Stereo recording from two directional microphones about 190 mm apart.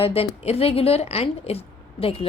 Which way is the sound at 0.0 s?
30° left (ahead or behind).